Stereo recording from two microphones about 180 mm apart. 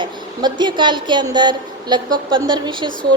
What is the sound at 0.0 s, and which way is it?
A woman's voice, 25° right (ahead or behind).